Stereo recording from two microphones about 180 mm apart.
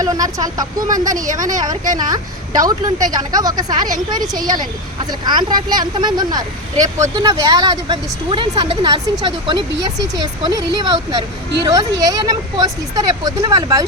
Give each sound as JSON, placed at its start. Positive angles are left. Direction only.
{"t": 0.0, "sound": "speech", "side_deg": -20}
{"t": 1.1, "sound": "speech", "side_deg": -45}
{"t": 1.6, "sound": "speech", "side_deg": -20}
{"t": 5.2, "sound": "speech", "side_deg": -25}